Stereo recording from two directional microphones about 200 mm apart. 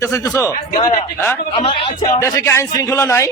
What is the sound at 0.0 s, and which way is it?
Speech, 15° left (ahead or behind).